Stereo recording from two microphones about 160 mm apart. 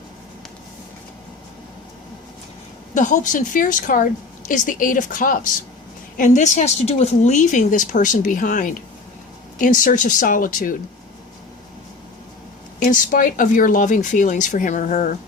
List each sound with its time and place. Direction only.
2.9 s a woman's voice: 55° left (ahead or behind)
12.8 s a woman's voice: 60° left (ahead or behind)